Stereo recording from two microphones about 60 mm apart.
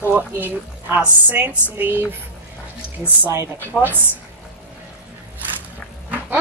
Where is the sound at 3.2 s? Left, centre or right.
Right.